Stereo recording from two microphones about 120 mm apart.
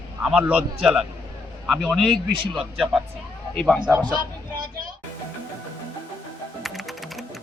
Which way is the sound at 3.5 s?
5° left (ahead or behind).